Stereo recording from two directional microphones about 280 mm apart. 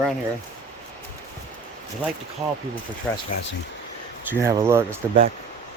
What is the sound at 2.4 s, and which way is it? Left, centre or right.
Speech, centre.